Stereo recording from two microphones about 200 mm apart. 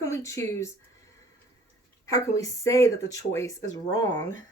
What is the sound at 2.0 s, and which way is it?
Speech, 15° left (ahead or behind).